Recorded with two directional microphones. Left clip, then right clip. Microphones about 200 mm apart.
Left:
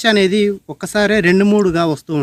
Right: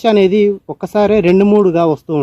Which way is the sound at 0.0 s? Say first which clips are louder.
Right 3 dB; 20° left (ahead or behind).